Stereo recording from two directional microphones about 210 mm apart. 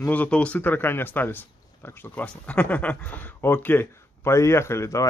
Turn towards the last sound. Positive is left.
turn(degrees=15)  # may be behind; listen again after turning